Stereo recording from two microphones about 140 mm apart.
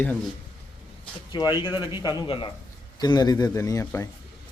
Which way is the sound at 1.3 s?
35° left (ahead or behind).